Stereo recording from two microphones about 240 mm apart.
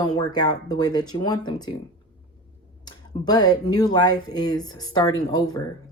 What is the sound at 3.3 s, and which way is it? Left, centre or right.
A woman's voice, centre.